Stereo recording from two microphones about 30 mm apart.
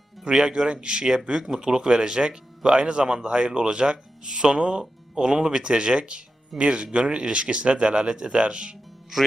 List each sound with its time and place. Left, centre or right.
0.3 s speech: right